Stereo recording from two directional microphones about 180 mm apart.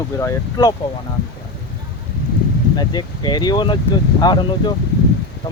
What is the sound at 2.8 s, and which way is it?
Speech, 25° left (ahead or behind).